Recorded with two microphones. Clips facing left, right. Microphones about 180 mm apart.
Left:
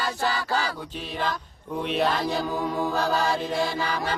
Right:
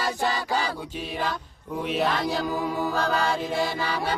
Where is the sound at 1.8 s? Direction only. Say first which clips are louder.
Left 1 dB; 5° right (ahead or behind).